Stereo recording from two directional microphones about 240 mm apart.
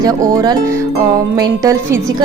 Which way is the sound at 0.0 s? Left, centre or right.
Centre.